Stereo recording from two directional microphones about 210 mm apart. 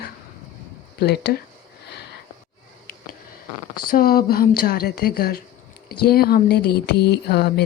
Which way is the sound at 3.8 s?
45° left (ahead or behind).